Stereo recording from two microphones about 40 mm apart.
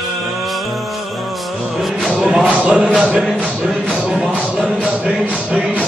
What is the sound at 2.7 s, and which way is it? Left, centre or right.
Speech, right.